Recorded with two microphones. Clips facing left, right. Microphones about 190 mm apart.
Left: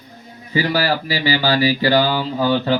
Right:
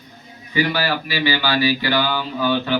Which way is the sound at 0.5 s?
35° left (ahead or behind).